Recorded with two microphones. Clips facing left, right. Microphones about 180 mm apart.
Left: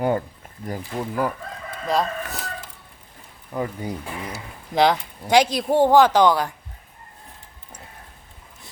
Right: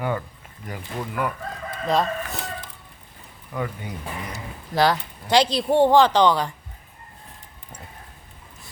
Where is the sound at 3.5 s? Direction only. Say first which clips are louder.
Left 3 dB; 35° left (ahead or behind).